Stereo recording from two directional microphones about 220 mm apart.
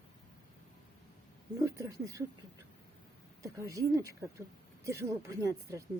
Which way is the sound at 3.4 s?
15° right (ahead or behind).